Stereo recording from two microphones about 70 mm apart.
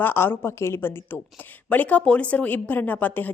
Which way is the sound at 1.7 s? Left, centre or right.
Left.